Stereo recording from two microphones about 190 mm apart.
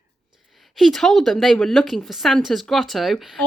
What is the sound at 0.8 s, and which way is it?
A woman's voice, centre (ahead or behind).